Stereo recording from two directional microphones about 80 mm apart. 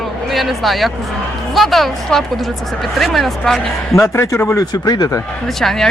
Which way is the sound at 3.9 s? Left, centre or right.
Left.